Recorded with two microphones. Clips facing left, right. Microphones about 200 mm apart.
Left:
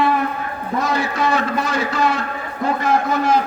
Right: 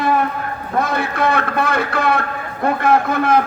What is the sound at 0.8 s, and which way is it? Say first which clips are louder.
A man's voice: right 2 dB; 55° right (ahead or behind).